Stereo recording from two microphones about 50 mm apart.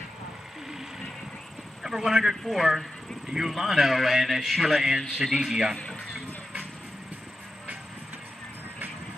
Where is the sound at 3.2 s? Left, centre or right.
Centre.